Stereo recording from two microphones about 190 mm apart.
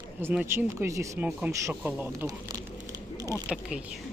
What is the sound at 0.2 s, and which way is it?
Speech, 10° right (ahead or behind).